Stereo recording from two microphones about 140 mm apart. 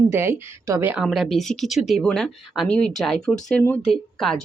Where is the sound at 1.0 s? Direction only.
Centre (ahead or behind).